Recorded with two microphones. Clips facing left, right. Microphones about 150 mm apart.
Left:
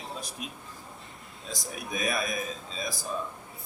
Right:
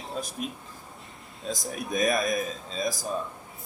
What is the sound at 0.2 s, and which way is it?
Speech, 50° right (ahead or behind).